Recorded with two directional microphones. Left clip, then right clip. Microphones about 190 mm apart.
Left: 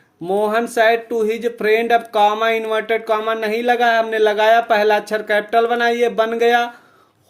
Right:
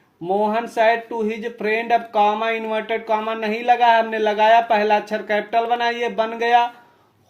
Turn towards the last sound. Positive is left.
turn(degrees=40)  # may be behind; listen again after turning